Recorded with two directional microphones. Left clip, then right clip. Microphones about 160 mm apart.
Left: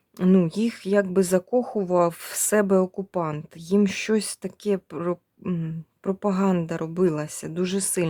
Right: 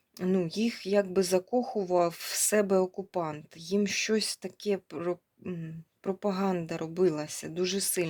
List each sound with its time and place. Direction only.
0.2 s speech: 40° left (ahead or behind)